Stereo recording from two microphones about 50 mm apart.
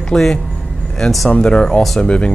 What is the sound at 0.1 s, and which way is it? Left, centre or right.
Speech, centre.